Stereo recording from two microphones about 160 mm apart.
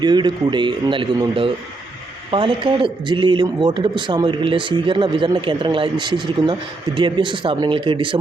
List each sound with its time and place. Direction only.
0.0 s a man's voice: 30° right (ahead or behind)